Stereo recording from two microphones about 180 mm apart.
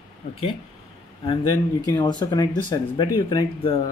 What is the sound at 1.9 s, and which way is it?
Speech, 20° left (ahead or behind).